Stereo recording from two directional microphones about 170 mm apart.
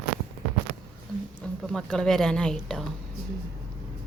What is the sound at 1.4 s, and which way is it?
Speech, centre (ahead or behind).